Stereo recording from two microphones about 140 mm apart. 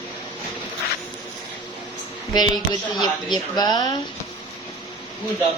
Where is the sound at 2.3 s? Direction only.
30° left (ahead or behind).